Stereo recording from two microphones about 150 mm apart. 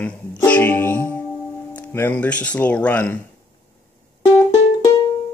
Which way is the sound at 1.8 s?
10° left (ahead or behind).